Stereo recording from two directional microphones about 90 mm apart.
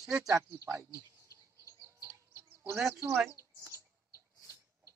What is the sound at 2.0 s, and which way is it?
Insect, 30° right (ahead or behind).